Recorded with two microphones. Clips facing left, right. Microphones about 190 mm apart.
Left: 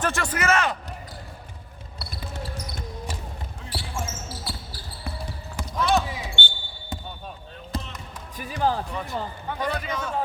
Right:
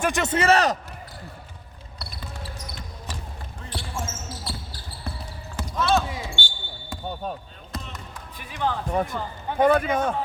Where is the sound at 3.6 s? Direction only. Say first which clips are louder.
Even; 5° left (ahead or behind).